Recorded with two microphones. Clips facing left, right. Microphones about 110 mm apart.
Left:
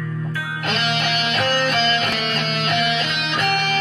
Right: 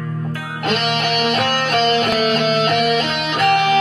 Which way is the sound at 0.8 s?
40° right (ahead or behind).